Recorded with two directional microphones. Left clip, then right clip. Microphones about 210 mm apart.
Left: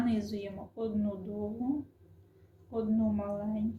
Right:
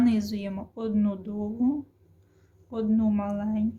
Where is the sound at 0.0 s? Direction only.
40° right (ahead or behind).